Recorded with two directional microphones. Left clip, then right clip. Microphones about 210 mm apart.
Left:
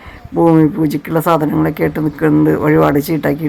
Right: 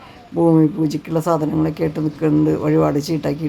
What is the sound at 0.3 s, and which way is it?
Speech, 10° left (ahead or behind).